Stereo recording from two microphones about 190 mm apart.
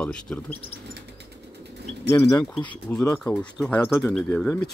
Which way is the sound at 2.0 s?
15° left (ahead or behind).